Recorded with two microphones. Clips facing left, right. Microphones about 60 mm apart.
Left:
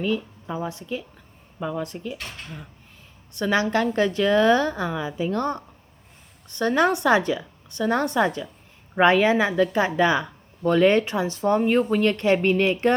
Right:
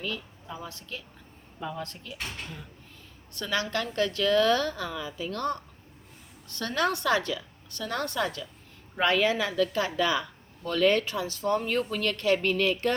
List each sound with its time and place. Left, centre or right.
0.0 s a woman's voice: left